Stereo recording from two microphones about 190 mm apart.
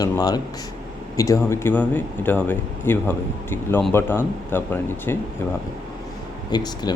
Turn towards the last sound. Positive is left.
turn(degrees=20)  # may be behind; listen again after turning